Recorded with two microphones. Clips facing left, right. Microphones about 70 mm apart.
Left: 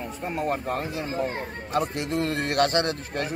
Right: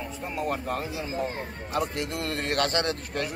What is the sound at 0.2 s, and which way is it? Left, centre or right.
Speech, left.